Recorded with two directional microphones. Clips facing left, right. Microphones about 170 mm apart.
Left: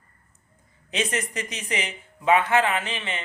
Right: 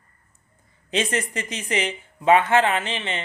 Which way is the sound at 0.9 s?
30° right (ahead or behind).